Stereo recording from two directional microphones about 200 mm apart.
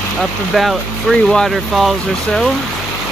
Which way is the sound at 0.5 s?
Centre (ahead or behind).